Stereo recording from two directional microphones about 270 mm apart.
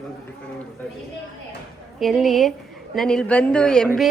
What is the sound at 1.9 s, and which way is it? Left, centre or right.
A woman's voice, centre.